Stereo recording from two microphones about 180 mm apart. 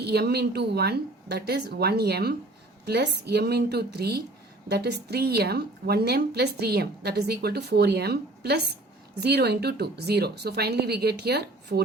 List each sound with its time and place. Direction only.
0.0 s a woman's voice: 65° right (ahead or behind)